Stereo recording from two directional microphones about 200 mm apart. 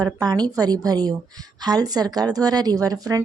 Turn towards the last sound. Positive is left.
turn(degrees=-20)  # may be behind; listen again after turning